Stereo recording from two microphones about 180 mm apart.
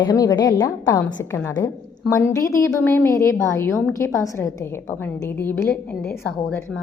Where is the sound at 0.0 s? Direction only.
20° left (ahead or behind).